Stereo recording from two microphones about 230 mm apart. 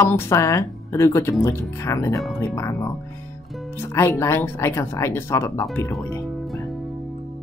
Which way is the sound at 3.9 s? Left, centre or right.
Centre.